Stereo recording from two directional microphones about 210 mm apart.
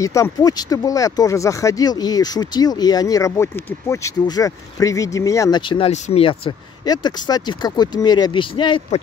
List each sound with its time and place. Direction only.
0.0 s speech: 15° left (ahead or behind)